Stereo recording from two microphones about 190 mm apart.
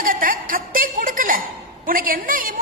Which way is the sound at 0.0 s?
45° right (ahead or behind).